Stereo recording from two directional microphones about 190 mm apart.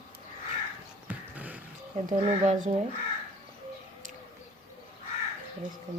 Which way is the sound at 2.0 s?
40° right (ahead or behind).